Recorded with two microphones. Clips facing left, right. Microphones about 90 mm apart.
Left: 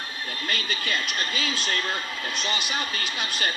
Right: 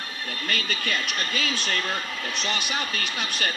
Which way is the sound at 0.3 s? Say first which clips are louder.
Right 1 dB; 25° left (ahead or behind).